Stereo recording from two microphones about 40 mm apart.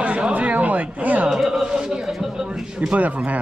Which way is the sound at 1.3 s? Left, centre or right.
Centre.